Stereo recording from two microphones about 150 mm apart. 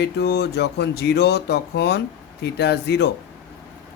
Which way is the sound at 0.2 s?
90° left.